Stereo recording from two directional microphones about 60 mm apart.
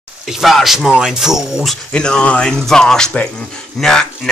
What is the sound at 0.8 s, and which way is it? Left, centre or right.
Speech, centre.